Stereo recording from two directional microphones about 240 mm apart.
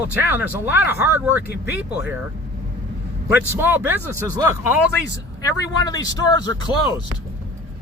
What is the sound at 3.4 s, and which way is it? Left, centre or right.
Speech, centre.